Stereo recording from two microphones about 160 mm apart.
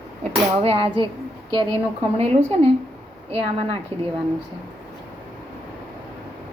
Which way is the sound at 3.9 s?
40° right (ahead or behind).